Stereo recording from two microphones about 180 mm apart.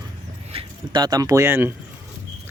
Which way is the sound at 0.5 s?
25° right (ahead or behind).